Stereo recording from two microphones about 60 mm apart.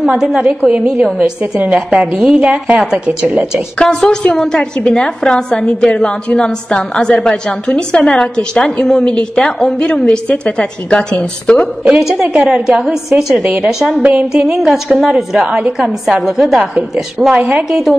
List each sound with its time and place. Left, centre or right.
0.0 s a woman's voice: centre
3.7 s a woman's voice: centre
12.0 s a woman's voice: centre
14.7 s a woman's voice: centre
15.4 s a woman's voice: centre
16.3 s a woman's voice: centre
17.4 s a woman's voice: right
17.6 s a woman's voice: centre